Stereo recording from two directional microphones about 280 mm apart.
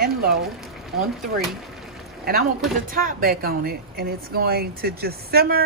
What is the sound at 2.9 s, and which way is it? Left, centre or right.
Speech, right.